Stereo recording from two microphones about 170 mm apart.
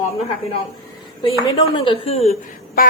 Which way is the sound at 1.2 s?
30° left (ahead or behind).